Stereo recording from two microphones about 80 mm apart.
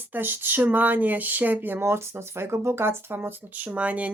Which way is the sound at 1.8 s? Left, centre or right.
Right.